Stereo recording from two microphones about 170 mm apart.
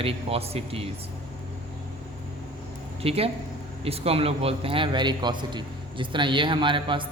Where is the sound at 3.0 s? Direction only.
35° right (ahead or behind).